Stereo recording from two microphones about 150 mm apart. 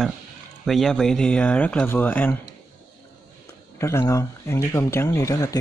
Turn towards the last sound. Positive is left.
turn(degrees=20)  # may be behind; listen again after turning